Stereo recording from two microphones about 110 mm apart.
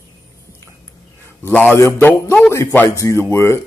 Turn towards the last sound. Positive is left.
turn(degrees=25)  # may be behind; listen again after turning